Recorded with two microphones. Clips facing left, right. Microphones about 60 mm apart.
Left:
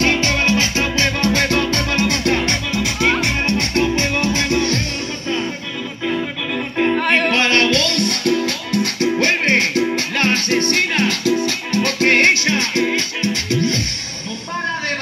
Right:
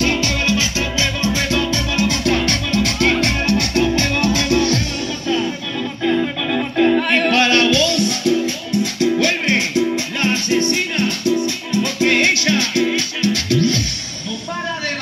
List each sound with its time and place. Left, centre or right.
0.0 s music: left
2.7 s music: centre
3.4 s music: left
7.0 s music: left
9.0 s music: left
9.8 s music: left
10.7 s music: left
11.4 s music: left
12.1 s music: left